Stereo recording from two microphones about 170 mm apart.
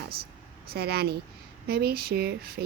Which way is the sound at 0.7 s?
65° right (ahead or behind).